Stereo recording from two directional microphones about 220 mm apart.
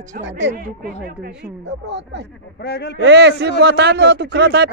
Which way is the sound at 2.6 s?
50° left (ahead or behind).